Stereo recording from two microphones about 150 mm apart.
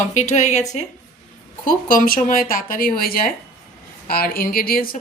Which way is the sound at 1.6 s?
65° left (ahead or behind).